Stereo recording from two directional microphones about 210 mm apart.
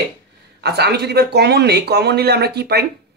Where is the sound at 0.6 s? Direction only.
50° right (ahead or behind).